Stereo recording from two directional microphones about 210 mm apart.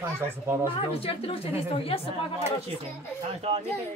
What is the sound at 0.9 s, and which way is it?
A woman's voice, 25° left (ahead or behind).